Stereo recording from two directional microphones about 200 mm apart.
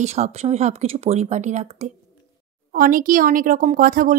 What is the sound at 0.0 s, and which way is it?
A woman's voice, 35° right (ahead or behind).